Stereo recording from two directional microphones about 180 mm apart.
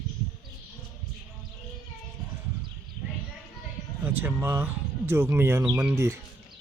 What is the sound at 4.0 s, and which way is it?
Speech, 10° right (ahead or behind).